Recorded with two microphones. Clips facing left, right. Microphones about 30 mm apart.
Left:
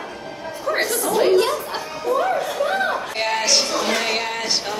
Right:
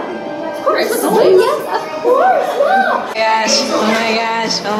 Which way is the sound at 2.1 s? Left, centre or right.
Right.